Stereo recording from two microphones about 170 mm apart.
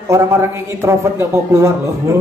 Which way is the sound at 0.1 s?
15° right (ahead or behind).